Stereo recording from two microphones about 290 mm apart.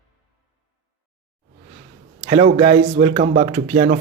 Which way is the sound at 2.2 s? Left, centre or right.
Right.